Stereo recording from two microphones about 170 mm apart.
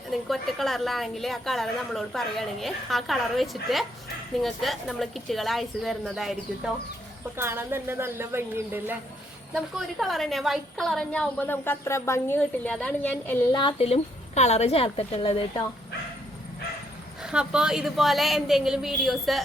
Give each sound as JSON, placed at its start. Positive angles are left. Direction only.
{"t": 0.1, "sound": "a woman's voice", "side_deg": 0}
{"t": 7.3, "sound": "a woman's voice", "side_deg": -15}
{"t": 13.5, "sound": "a woman's voice", "side_deg": 25}
{"t": 17.2, "sound": "a woman's voice", "side_deg": -5}